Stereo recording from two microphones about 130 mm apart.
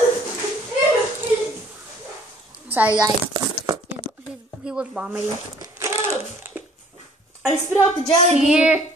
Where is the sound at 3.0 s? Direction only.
30° right (ahead or behind).